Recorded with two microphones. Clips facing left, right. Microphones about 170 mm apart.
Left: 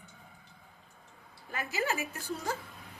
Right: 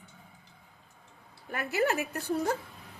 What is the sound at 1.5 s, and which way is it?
A woman's voice, 60° right (ahead or behind).